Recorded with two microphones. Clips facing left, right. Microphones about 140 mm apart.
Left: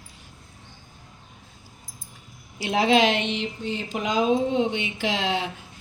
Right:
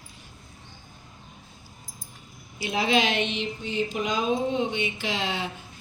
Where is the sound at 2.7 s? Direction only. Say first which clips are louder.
Left 4 dB; 90° left.